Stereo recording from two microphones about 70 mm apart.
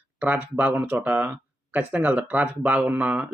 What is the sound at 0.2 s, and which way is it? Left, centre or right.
Speech, right.